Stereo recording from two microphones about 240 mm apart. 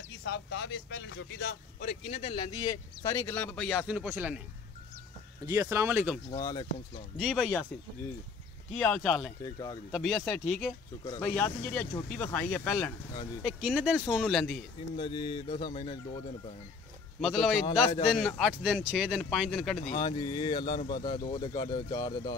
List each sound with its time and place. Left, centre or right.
0.2 s speech: left
2.1 s speech: left; by 4.4 s centre
5.5 s speech: centre
6.3 s speech: centre
7.2 s speech: centre
8.7 s speech: centre
9.4 s speech: centre
9.8 s speech: centre
11.1 s speech: centre
15.0 s speech: left
17.2 s speech: centre
19.8 s speech: left